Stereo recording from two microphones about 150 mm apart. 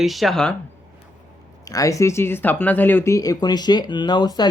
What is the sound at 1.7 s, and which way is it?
Speech, 20° left (ahead or behind).